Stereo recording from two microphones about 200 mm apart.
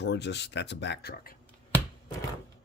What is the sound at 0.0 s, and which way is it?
Speech, 60° left (ahead or behind).